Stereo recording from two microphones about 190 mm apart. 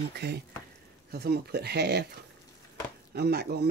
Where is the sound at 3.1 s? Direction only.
55° right (ahead or behind).